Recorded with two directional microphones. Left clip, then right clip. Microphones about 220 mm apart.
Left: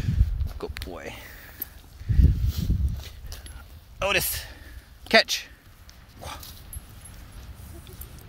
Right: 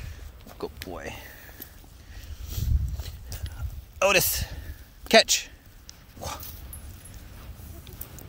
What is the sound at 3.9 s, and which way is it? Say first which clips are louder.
Speech: right 3 dB; 30° right (ahead or behind).